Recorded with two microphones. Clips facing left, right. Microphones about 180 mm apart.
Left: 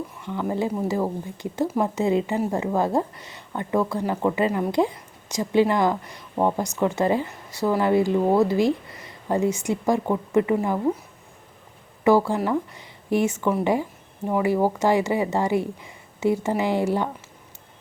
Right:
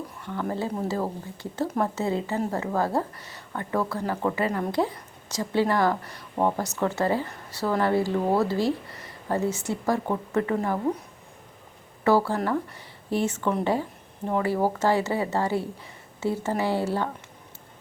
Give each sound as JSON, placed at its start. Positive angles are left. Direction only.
{"t": 0.3, "sound": "speech", "side_deg": 15}
{"t": 12.0, "sound": "speech", "side_deg": 15}